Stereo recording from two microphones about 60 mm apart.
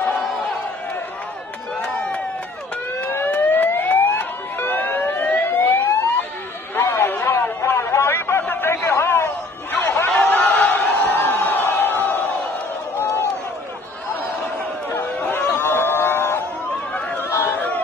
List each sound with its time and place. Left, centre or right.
2.0 s a sound: centre
3.0 s siren: left
4.2 s emergency vehicle: left
5.3 s siren: left
6.7 s chatter: left
10.1 s crowd: left
12.9 s run: left
15.5 s a sound: left
17.2 s chatter: left